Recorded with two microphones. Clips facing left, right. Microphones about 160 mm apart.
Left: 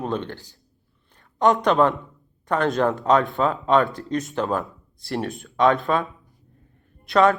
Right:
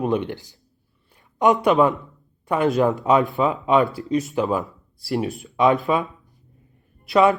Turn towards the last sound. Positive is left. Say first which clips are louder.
# right 1 dB
turn(degrees=-5)  # may be behind; listen again after turning